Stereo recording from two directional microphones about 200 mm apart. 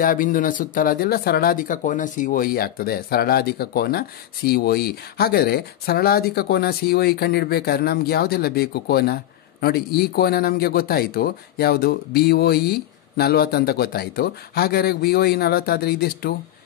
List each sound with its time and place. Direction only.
0.0 s speech: 45° left (ahead or behind)